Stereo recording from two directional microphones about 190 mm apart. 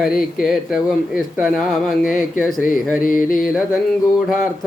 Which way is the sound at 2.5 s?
45° left (ahead or behind).